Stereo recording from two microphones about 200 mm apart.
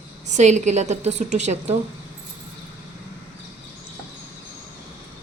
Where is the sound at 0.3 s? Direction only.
35° right (ahead or behind).